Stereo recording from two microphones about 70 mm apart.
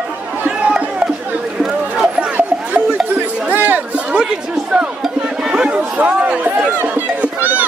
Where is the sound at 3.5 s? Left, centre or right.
Right.